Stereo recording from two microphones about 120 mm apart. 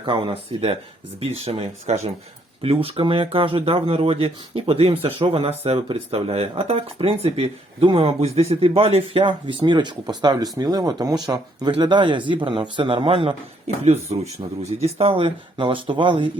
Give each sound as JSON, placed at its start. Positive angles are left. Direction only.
{"t": 0.0, "sound": "speech", "side_deg": -45}
{"t": 14.2, "sound": "speech", "side_deg": -60}